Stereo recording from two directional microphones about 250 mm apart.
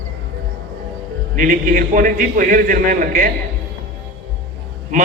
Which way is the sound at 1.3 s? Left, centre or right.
Right.